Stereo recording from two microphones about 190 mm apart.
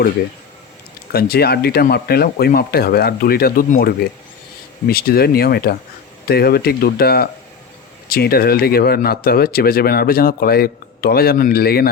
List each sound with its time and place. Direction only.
1.1 s speech: 55° left (ahead or behind)